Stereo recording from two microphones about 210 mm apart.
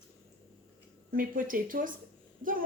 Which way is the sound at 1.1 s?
40° right (ahead or behind).